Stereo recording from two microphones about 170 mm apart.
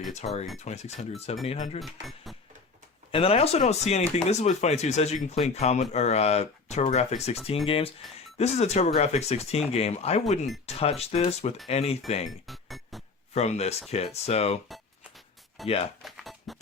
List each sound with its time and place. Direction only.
0.2 s speech: 40° left (ahead or behind)
1.8 s speech: centre (ahead or behind)
3.1 s speech: 35° left (ahead or behind)
8.0 s speech: centre (ahead or behind)
8.4 s speech: 40° left (ahead or behind)
12.5 s music: centre (ahead or behind)
13.3 s speech: 40° left (ahead or behind)
15.6 s speech: 35° left (ahead or behind)
16.0 s music: centre (ahead or behind)